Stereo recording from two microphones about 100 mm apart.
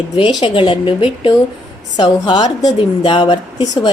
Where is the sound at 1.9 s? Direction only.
45° left (ahead or behind).